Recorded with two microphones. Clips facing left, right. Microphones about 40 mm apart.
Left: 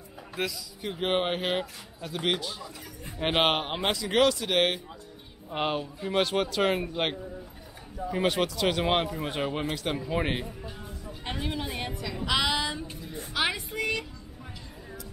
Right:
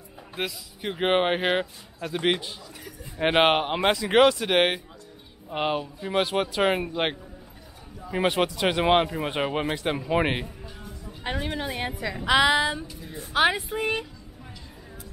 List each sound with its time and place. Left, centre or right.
0.4 s speech: centre
3.9 s speech: right
5.5 s speech: centre
8.1 s speech: centre
11.2 s a woman's voice: centre